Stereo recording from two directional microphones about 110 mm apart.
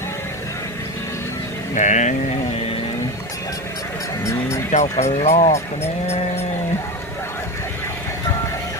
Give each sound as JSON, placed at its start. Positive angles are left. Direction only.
{"t": 1.8, "sound": "sheep", "side_deg": 90}
{"t": 4.2, "sound": "speech", "side_deg": 25}
{"t": 4.7, "sound": "speech", "side_deg": 90}